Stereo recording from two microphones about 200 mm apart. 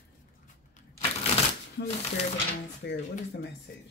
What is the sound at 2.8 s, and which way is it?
Speech, 55° left (ahead or behind).